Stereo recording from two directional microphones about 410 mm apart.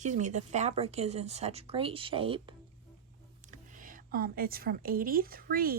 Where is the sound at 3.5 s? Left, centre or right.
Centre.